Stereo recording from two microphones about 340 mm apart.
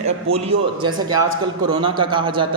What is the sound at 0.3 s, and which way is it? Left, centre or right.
A man's voice, centre.